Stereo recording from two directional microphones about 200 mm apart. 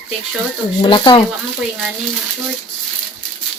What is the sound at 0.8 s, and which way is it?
Speech, 20° left (ahead or behind).